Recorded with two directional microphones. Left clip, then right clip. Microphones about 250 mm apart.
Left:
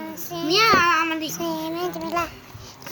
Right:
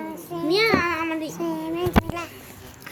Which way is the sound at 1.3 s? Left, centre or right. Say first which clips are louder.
Left 1 dB; centre.